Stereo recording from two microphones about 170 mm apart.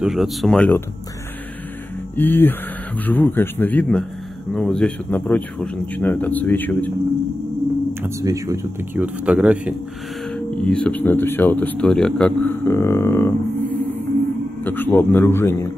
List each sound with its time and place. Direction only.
0.0 s speech: centre (ahead or behind)
2.1 s speech: 10° left (ahead or behind)
8.0 s speech: 15° right (ahead or behind)
10.3 s speech: 5° left (ahead or behind)